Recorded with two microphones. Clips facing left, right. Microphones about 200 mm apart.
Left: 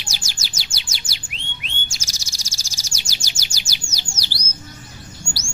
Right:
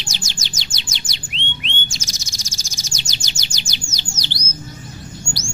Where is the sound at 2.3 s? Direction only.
10° left (ahead or behind).